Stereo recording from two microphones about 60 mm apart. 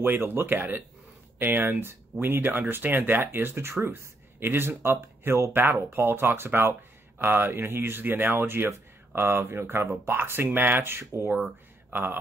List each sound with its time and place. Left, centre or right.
0.0 s a man's voice: right